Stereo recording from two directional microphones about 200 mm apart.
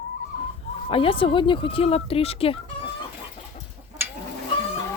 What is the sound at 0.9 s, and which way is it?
Speech, 25° left (ahead or behind).